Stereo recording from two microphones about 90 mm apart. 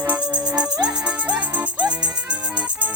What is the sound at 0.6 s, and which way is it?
Music, 45° right (ahead or behind).